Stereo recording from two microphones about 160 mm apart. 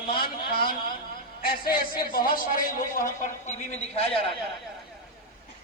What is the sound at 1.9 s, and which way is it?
Speech, 65° left (ahead or behind).